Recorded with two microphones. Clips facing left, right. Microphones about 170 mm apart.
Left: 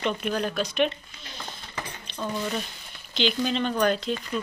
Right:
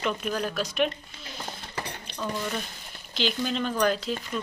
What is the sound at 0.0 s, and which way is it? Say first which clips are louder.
Speech: left 2 dB; centre (ahead or behind).